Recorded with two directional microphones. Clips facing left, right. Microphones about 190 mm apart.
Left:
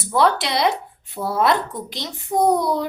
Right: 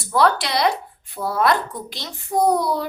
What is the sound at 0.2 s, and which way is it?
Speech, 20° left (ahead or behind).